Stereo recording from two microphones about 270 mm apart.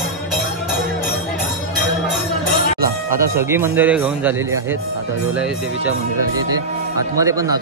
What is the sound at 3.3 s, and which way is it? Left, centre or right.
A man's voice, centre.